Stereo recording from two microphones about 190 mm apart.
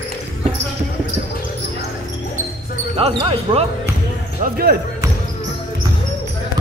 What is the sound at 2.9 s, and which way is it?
Speech, 30° right (ahead or behind).